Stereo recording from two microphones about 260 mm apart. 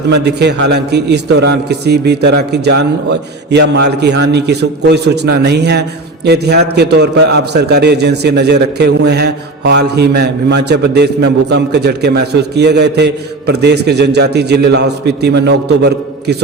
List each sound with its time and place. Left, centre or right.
0.1 s a man's voice: right